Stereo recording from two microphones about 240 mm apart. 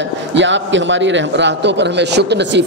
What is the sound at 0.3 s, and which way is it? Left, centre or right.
A man's voice, right.